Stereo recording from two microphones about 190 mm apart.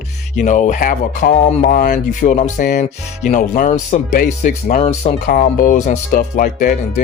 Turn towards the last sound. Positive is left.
turn(degrees=45)  # may be behind; listen again after turning